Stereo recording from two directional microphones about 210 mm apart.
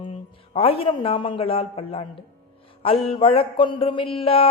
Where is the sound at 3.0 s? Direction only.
25° left (ahead or behind).